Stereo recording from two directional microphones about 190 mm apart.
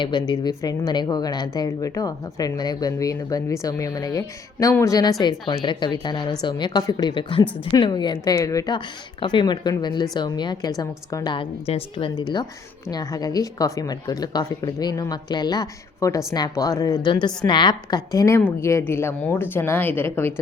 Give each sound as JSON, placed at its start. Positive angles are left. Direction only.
{"t": 0.0, "sound": "a woman's voice", "side_deg": 25}